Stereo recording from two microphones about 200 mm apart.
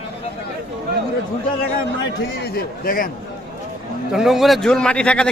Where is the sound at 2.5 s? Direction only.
45° left (ahead or behind).